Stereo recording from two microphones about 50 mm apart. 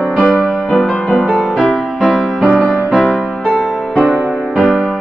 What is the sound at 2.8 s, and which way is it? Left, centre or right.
Music, centre.